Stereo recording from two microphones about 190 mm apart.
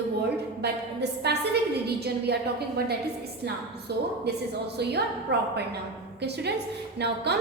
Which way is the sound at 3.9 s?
60° right (ahead or behind).